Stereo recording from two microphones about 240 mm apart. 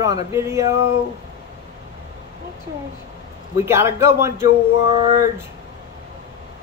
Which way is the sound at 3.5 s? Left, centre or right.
Centre.